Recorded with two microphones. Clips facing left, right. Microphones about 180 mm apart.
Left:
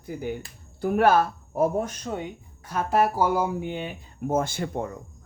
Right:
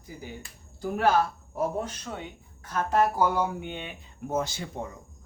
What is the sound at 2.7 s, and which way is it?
Speech, 10° left (ahead or behind).